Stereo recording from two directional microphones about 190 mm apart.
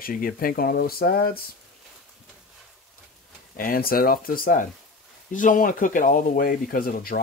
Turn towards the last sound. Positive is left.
turn(degrees=50)  # may be behind; listen again after turning